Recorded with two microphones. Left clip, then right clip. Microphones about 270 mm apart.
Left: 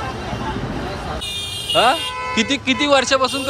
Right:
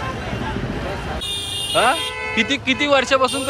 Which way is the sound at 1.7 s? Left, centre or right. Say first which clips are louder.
Left 2 dB; centre.